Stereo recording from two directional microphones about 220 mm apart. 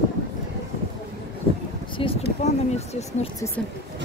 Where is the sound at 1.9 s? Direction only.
25° left (ahead or behind).